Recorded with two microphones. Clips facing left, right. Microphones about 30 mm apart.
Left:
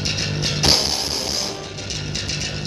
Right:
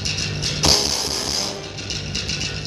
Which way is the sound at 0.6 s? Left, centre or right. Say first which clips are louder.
Even; centre.